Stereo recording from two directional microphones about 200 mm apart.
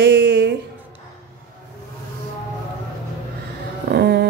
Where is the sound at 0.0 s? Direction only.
60° right (ahead or behind).